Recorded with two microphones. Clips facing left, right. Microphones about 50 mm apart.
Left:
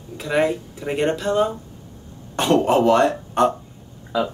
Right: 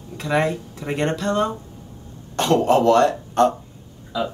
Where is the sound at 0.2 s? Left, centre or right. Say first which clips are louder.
Left 1 dB; centre.